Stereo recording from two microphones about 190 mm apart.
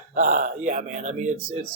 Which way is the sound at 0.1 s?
40° right (ahead or behind).